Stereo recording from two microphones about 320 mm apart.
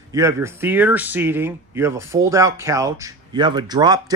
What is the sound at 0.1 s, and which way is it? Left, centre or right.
Speech, centre.